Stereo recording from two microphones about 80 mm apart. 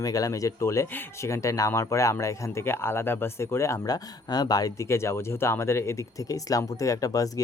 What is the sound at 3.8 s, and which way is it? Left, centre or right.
Speech, left.